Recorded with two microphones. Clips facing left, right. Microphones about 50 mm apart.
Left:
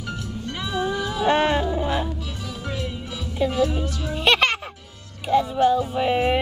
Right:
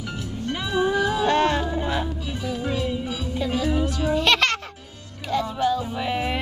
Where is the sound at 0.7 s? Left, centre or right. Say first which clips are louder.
Right 4 dB; centre.